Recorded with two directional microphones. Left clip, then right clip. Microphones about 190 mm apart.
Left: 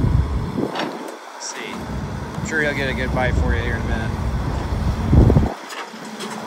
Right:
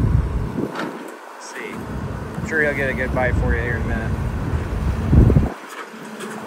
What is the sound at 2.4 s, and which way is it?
Speech, 10° left (ahead or behind).